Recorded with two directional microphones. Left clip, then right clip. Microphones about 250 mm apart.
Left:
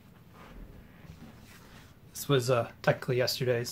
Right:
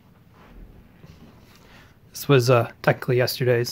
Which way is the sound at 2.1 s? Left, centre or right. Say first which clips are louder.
Right 9 dB; right.